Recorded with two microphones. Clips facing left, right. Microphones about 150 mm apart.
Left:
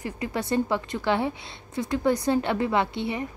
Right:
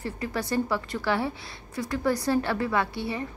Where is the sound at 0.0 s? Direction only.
20° left (ahead or behind).